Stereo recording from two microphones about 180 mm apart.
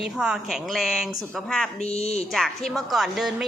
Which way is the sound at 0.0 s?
5° right (ahead or behind).